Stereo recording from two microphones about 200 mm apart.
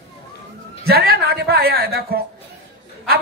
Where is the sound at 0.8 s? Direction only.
50° right (ahead or behind).